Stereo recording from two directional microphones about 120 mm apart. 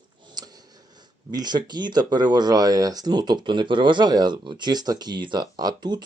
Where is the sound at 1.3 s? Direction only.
35° right (ahead or behind).